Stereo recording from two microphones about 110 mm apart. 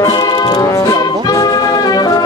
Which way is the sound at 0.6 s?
30° left (ahead or behind).